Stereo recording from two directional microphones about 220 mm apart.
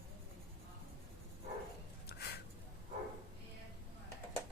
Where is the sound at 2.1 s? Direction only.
45° left (ahead or behind).